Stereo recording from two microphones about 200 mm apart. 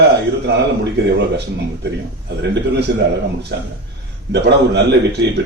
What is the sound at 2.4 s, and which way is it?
A man's voice, 55° right (ahead or behind).